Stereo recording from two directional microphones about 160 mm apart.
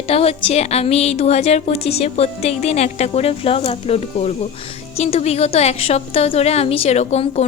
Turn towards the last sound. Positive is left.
turn(degrees=40)  # may be behind; listen again after turning